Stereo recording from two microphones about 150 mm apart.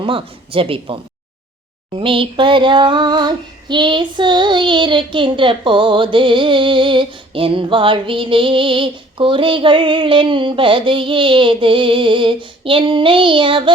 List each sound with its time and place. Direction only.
0.0 s child singing: 35° right (ahead or behind)
2.0 s child singing: 35° right (ahead or behind)